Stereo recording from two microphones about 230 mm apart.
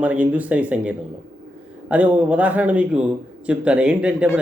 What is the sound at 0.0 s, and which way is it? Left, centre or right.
A man's voice, centre.